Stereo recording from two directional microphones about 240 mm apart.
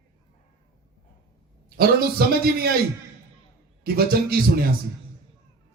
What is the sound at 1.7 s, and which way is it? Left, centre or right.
Speech, right.